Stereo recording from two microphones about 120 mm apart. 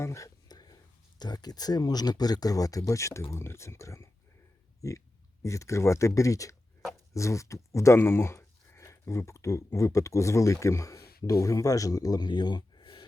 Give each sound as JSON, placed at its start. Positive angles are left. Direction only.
{"t": 0.0, "sound": "whispering", "side_deg": 25}
{"t": 1.2, "sound": "speech", "side_deg": 35}